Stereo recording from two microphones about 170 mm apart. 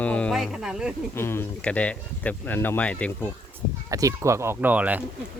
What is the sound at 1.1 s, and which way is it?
Speech, 15° left (ahead or behind).